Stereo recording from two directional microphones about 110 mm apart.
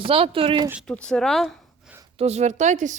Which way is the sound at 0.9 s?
10° left (ahead or behind).